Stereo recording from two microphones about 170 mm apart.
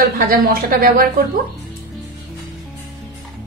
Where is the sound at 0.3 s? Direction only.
60° right (ahead or behind).